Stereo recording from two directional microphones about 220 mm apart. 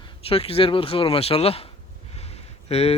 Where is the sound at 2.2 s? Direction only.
30° left (ahead or behind).